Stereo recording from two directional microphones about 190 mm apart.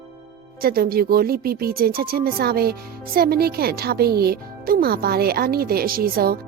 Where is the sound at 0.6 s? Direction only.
50° right (ahead or behind).